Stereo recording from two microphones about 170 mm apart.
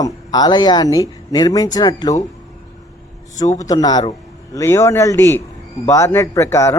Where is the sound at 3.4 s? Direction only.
20° left (ahead or behind).